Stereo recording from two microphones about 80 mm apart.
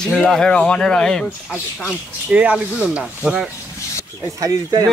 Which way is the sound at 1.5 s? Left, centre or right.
Centre.